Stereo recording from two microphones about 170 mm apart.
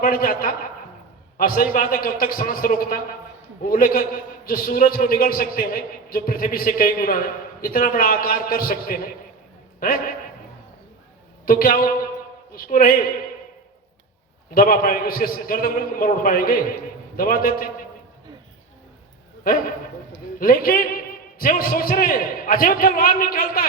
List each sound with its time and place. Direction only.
0.0 s a man's voice: 55° left (ahead or behind)
11.4 s a man's voice: 55° left (ahead or behind)
14.5 s a man's voice: 55° left (ahead or behind)
19.5 s a man's voice: 60° left (ahead or behind)